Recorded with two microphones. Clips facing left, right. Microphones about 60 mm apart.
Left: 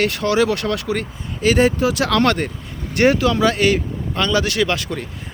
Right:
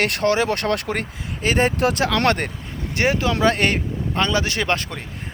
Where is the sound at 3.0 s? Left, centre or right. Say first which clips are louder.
Left 5 dB; right.